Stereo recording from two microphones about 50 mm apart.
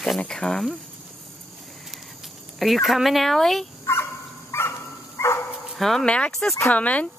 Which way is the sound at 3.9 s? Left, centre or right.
Left.